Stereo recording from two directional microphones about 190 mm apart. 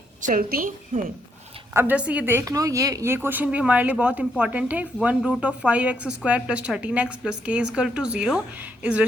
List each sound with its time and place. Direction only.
0.2 s a woman's voice: 45° right (ahead or behind)
1.7 s a woman's voice: 10° right (ahead or behind)